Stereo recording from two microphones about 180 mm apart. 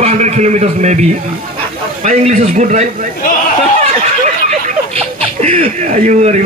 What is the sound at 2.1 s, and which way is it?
Speech, 40° right (ahead or behind).